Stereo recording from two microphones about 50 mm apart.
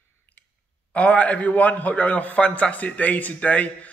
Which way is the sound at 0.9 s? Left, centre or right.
Left.